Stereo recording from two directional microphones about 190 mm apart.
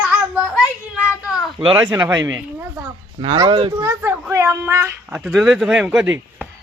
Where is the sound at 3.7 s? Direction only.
15° right (ahead or behind).